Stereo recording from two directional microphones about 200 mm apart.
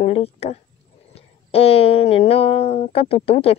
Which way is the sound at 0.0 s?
30° left (ahead or behind).